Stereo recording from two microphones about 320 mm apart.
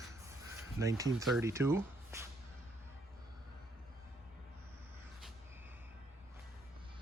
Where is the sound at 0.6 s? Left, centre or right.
Centre.